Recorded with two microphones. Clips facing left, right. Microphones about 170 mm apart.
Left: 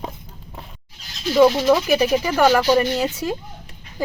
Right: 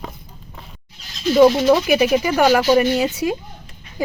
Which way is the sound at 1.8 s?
10° right (ahead or behind).